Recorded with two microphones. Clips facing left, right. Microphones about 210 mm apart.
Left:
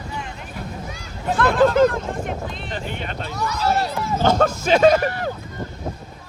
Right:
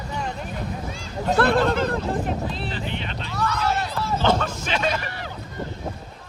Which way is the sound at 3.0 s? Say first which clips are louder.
Left 1 dB; 50° left (ahead or behind).